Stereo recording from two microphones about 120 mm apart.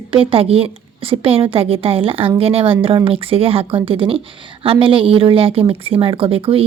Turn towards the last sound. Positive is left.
turn(degrees=-50)  # may be behind; listen again after turning